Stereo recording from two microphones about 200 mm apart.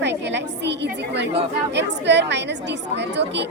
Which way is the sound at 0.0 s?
60° right (ahead or behind).